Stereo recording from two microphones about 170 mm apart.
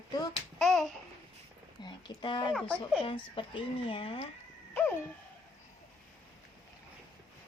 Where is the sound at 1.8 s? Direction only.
25° left (ahead or behind).